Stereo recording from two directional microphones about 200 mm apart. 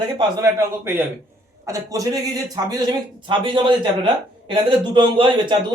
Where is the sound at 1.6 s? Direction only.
15° right (ahead or behind).